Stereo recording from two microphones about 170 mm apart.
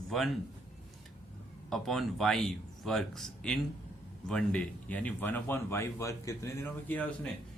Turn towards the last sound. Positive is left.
turn(degrees=10)  # may be behind; listen again after turning